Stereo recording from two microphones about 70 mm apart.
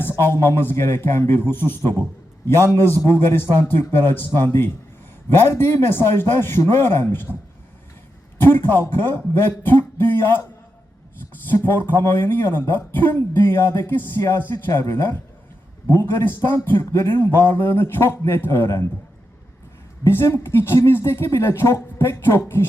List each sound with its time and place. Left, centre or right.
0.2 s speech: left
8.4 s speech: left
11.4 s speech: left
20.1 s speech: left